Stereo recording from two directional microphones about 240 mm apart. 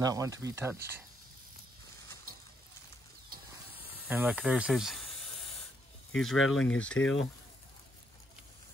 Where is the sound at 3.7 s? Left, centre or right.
Centre.